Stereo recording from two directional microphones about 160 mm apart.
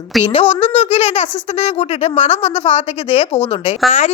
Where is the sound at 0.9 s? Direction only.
45° left (ahead or behind).